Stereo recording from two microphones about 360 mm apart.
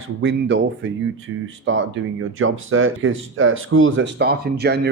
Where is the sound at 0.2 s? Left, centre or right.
Right.